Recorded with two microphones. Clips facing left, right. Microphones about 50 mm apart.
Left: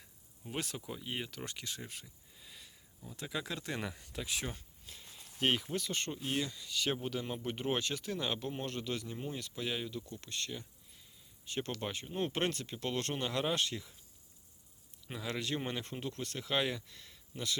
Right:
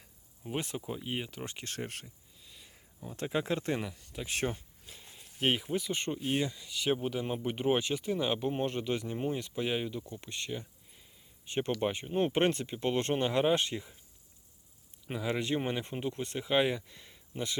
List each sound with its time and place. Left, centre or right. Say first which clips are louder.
0.6 s speech: right 4 dB; right
1.6 s speech: right 6 dB; right
2.7 s a sound: right 10 dB; right
3.2 s speech: right 8 dB; right
4.1 s speech: right 3 dB; centre
4.9 s a sound: right 1 dB; centre
5.4 s speech: right 3 dB; centre
6.7 s speech: right 4 dB; centre
15.0 s speech: right 6 dB; right